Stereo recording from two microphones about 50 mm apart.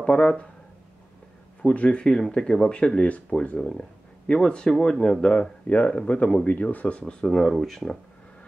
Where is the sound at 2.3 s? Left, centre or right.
Centre; by 3.6 s left.